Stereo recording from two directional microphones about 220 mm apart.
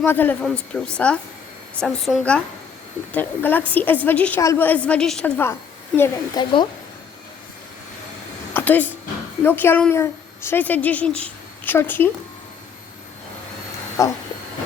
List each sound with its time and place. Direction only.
0.0 s a woman's voice: 10° left (ahead or behind)
6.0 s a woman's voice: 20° left (ahead or behind)
8.5 s a sound: 10° left (ahead or behind)
9.4 s a woman's voice: 10° left (ahead or behind)
14.0 s a woman's voice: 15° left (ahead or behind)